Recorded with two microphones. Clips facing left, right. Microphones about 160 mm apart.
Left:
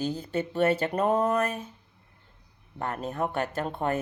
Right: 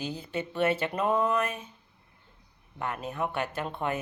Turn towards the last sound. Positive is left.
turn(degrees=40)  # may be behind; listen again after turning